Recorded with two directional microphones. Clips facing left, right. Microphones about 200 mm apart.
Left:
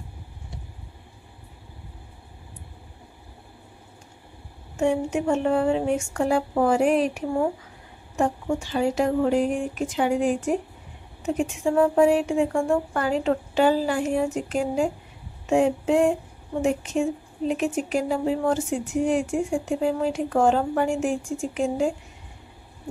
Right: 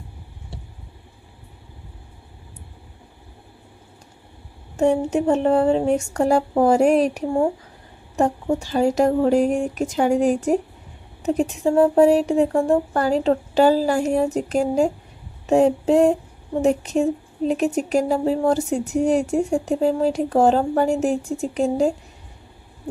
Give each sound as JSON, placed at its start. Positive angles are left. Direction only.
{"t": 4.7, "sound": "speech", "side_deg": -35}